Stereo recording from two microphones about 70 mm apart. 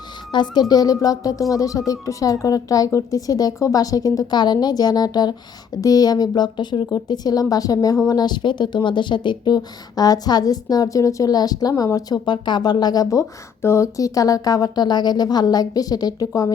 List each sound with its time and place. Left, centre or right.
0.3 s speech: left
0.7 s a woman's voice: left
8.0 s speech: left
9.4 s a woman's voice: left
13.6 s speech: left